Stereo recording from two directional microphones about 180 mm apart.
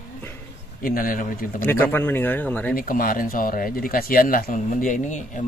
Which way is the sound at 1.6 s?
10° left (ahead or behind).